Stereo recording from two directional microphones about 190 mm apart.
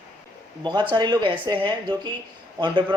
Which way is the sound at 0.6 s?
25° right (ahead or behind).